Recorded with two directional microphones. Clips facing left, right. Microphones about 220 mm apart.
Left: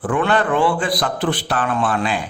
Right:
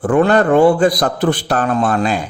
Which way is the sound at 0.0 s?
40° right (ahead or behind).